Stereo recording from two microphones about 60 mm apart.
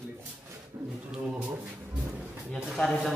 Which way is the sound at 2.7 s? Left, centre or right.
Centre.